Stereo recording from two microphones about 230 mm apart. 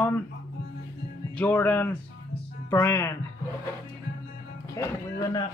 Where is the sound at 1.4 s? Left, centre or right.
Centre.